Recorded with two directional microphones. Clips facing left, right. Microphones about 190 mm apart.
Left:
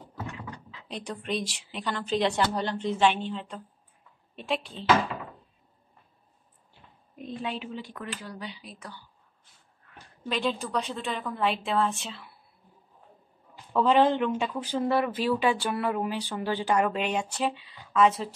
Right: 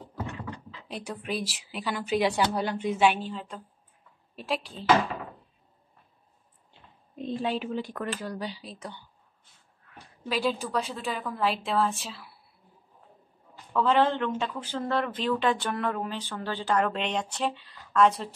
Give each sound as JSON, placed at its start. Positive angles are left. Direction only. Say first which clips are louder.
{"t": 0.8, "sound": "speech", "louder": "left 1 dB", "side_deg": -5}
{"t": 7.2, "sound": "a sound", "louder": "right 4 dB", "side_deg": -30}
{"t": 7.5, "sound": "speech", "louder": "right 6 dB", "side_deg": -50}
{"t": 9.8, "sound": "speech", "louder": "even", "side_deg": 0}
{"t": 13.7, "sound": "speech", "louder": "left 2 dB", "side_deg": 15}